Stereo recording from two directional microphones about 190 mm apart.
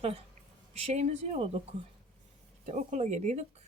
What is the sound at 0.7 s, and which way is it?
Speech, 35° right (ahead or behind).